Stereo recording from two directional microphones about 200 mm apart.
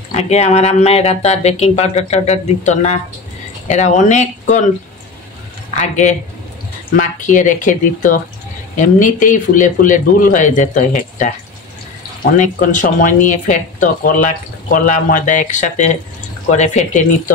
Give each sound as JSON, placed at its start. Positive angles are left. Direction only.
{"t": 0.1, "sound": "speech", "side_deg": 35}
{"t": 5.8, "sound": "speech", "side_deg": 35}